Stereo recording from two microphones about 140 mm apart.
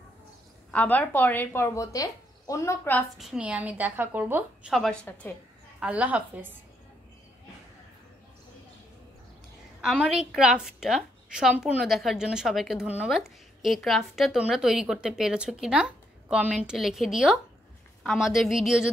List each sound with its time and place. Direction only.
0.7 s speech: 10° left (ahead or behind)
3.2 s a woman's voice: 5° right (ahead or behind)
5.0 s speech: 10° left (ahead or behind)
5.8 s a woman's voice: 10° right (ahead or behind)
9.8 s a woman's voice: 5° right (ahead or behind)